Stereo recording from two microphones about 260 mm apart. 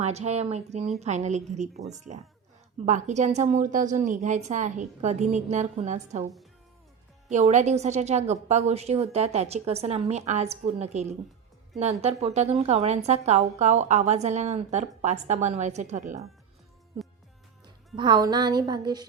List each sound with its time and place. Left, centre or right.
0.0 s a woman's voice: right
2.8 s a woman's voice: right
7.3 s a woman's voice: right
17.9 s music: centre